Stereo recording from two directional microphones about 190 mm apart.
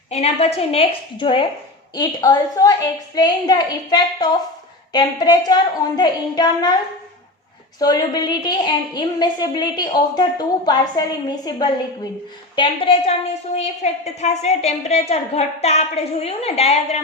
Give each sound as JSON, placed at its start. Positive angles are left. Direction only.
{"t": 0.1, "sound": "a woman's voice", "side_deg": 35}
{"t": 7.8, "sound": "a woman's voice", "side_deg": 20}